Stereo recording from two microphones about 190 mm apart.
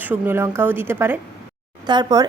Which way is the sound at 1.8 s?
20° right (ahead or behind).